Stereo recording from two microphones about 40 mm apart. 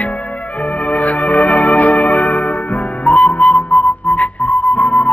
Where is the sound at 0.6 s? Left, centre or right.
Left.